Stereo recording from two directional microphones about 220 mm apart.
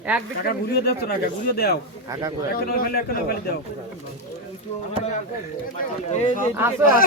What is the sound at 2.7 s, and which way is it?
Speech, 45° left (ahead or behind).